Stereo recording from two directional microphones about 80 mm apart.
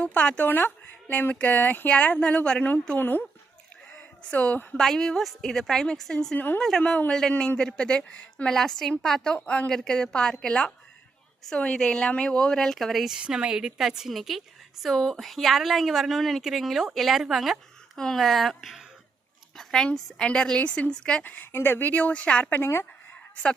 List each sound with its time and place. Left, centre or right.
0.0 s speech: centre
4.3 s speech: centre
4.8 s speech: centre
6.3 s speech: left
6.6 s a woman's voice: centre
19.5 s a woman's voice: centre
21.2 s speech: left
23.3 s speech: centre